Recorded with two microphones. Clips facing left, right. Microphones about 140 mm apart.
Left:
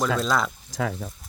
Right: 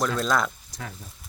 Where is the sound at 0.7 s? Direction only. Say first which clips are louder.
Left 11 dB; 90° left.